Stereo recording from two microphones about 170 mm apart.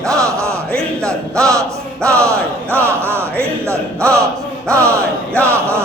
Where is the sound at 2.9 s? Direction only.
15° right (ahead or behind).